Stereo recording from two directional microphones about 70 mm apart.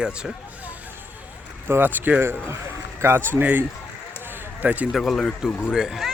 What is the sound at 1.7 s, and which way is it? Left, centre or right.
Speech, right.